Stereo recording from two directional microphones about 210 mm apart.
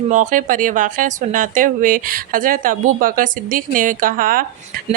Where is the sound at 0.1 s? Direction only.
35° right (ahead or behind).